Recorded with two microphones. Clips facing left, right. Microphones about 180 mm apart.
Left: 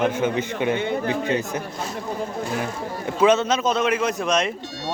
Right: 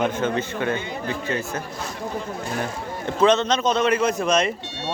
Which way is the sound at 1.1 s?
15° left (ahead or behind).